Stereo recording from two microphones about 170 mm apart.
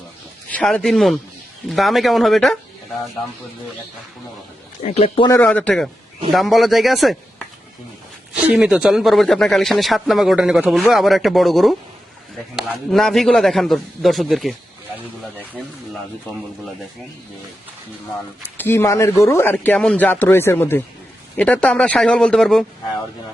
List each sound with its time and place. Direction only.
0.5 s a man's voice: 5° left (ahead or behind)
4.8 s speech: 40° left (ahead or behind)
5.3 s a man's voice: 10° left (ahead or behind)
18.5 s a man's voice: 15° left (ahead or behind)